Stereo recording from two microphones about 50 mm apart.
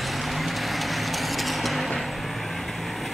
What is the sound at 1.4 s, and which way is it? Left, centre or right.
Vehicle, centre.